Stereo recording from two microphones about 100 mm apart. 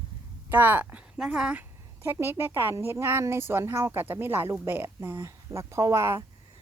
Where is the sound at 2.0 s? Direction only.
20° right (ahead or behind).